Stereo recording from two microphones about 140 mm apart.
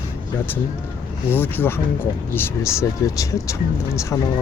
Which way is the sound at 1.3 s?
15° left (ahead or behind).